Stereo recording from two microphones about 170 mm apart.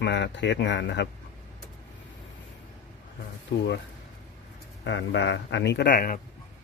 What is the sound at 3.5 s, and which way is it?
Speech, 90° left.